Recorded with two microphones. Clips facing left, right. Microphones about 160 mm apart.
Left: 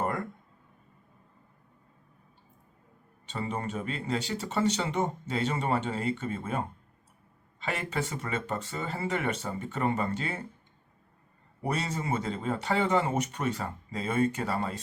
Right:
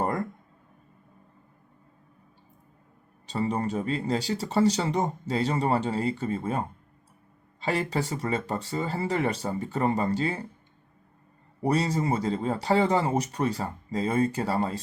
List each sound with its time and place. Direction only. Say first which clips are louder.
0.0 s a sound: right 3 dB; 35° right (ahead or behind)
3.2 s speech: right 6 dB; 35° right (ahead or behind)
7.6 s speech: right 5 dB; 35° right (ahead or behind)
11.6 s speech: right 7 dB; 35° right (ahead or behind)